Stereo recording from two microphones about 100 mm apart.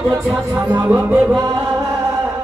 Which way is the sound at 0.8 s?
15° right (ahead or behind).